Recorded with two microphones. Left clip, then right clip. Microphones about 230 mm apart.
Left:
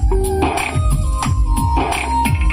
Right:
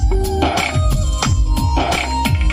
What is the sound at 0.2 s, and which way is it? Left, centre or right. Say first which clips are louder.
Music: right 1 dB; right.